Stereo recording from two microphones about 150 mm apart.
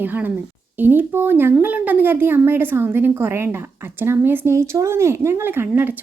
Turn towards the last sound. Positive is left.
turn(degrees=-15)  # may be behind; listen again after turning